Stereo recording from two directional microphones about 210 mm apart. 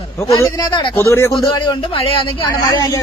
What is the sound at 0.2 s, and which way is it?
Speech, 15° left (ahead or behind).